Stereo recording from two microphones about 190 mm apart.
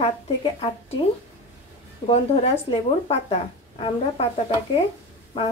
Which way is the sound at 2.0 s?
30° left (ahead or behind).